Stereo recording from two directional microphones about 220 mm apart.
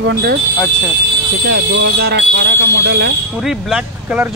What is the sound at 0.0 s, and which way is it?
Speech, 50° right (ahead or behind).